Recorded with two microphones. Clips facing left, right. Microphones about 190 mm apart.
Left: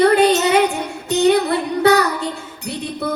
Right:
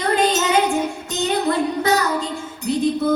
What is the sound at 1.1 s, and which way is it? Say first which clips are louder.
Music: left 11 dB; 65° left (ahead or behind).